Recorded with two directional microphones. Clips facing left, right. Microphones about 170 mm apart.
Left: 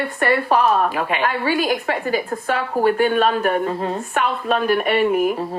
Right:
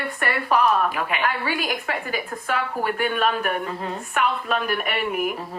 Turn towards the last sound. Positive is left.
turn(degrees=30)  # may be behind; listen again after turning